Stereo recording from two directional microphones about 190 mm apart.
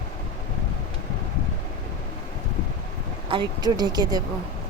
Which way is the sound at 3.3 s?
25° right (ahead or behind).